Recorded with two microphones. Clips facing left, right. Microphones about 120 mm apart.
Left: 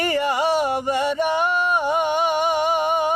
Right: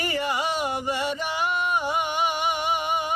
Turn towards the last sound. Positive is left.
turn(degrees=50)  # may be behind; listen again after turning